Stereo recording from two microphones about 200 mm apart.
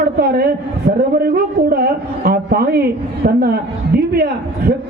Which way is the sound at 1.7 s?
50° right (ahead or behind).